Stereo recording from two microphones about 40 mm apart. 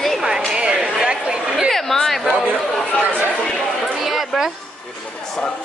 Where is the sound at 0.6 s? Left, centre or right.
Right.